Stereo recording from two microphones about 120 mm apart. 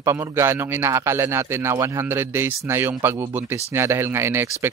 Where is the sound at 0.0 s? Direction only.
20° right (ahead or behind).